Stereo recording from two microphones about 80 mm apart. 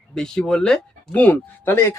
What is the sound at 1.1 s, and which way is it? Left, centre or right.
Speech, left.